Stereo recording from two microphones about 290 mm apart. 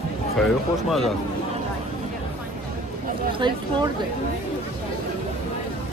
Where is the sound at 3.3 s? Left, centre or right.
Centre.